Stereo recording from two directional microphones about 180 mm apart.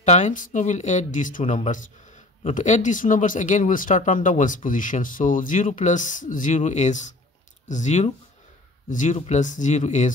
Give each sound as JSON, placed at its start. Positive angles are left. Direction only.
{"t": 0.0, "sound": "speech", "side_deg": 40}